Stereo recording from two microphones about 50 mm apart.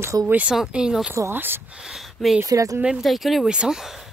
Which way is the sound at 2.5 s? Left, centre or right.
Right.